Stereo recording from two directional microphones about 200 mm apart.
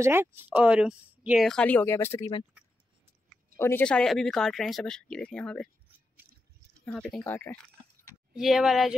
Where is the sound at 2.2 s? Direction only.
25° left (ahead or behind).